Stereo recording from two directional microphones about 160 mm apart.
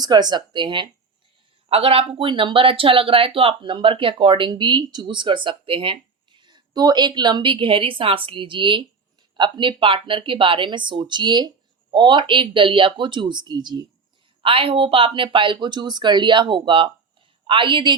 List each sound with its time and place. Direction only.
0.0 s a woman's voice: 25° right (ahead or behind)